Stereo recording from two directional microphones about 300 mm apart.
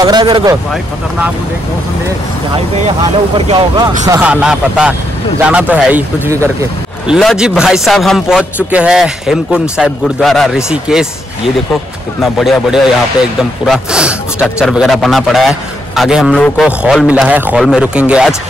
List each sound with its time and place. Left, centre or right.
0.0 s speech: centre
3.3 s a man's voice: centre